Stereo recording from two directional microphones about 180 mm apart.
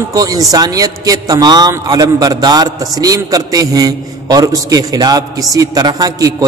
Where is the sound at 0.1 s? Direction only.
20° right (ahead or behind).